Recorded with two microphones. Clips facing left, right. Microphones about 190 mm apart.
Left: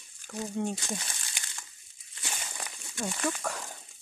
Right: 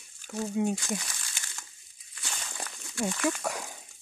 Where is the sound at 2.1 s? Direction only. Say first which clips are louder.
Left 1 dB; 15° left (ahead or behind).